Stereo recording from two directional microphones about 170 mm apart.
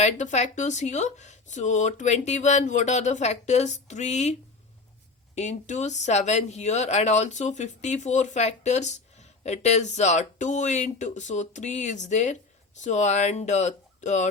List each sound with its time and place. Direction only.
0.0 s speech: 45° left (ahead or behind)